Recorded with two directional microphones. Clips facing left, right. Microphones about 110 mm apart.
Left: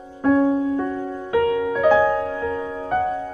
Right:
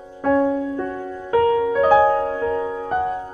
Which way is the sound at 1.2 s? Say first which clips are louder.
Right 3 dB; 35° right (ahead or behind).